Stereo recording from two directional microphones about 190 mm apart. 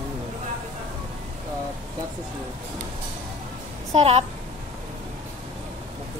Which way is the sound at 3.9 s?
30° right (ahead or behind).